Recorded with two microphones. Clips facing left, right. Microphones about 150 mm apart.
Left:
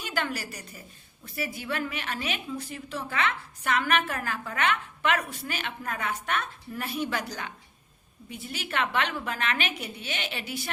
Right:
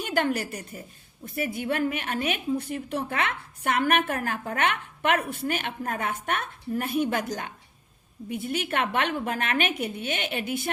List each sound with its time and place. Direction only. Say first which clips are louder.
0.0 s a woman's voice: right 6 dB; 55° right (ahead or behind)